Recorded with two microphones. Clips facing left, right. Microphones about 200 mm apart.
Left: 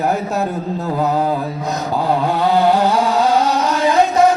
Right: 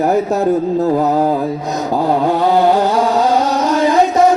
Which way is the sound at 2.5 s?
20° right (ahead or behind).